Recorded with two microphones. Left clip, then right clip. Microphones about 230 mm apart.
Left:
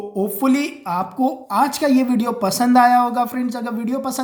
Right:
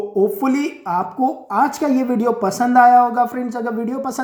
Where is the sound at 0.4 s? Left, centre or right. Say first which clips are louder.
Even; left.